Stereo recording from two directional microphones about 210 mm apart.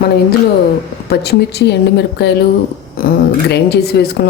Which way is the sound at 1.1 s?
50° left (ahead or behind).